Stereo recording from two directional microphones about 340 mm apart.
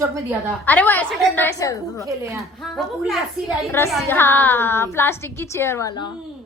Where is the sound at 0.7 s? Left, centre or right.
Centre.